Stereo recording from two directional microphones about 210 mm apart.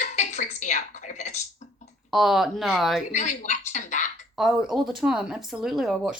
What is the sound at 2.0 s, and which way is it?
Speech, centre (ahead or behind).